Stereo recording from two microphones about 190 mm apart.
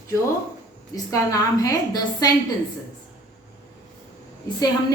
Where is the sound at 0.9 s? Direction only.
15° left (ahead or behind).